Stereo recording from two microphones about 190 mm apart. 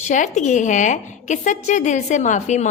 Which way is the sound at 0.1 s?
40° left (ahead or behind).